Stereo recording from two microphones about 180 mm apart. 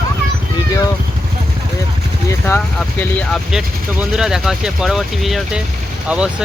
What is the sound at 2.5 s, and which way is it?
Speech, 10° left (ahead or behind).